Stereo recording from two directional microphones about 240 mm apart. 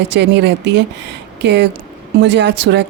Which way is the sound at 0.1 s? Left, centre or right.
Right.